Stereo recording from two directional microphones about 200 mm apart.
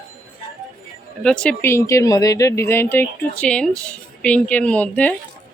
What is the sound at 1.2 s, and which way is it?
Speech, 5° left (ahead or behind).